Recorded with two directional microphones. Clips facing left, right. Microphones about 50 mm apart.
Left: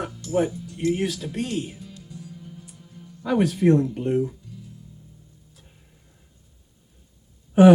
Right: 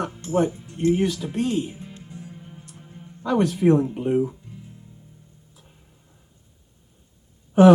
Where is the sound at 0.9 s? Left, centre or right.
Centre.